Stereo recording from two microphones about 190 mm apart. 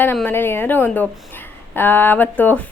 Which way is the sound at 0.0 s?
10° left (ahead or behind).